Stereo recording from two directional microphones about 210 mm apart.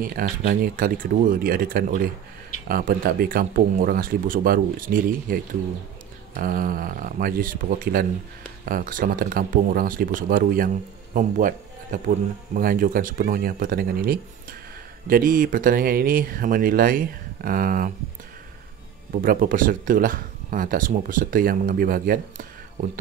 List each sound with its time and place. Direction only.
0.0 s speech: 45° right (ahead or behind)
19.2 s speech: 40° right (ahead or behind)